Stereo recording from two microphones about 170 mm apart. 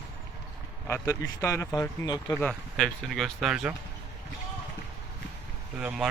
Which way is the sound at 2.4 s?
5° left (ahead or behind).